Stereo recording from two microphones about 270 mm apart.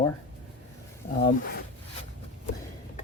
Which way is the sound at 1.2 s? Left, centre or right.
Left.